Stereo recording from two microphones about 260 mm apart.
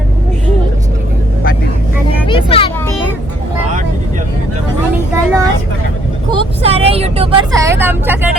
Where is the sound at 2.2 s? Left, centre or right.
Centre.